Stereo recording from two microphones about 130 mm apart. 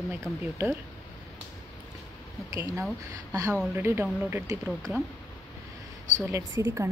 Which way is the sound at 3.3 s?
25° right (ahead or behind).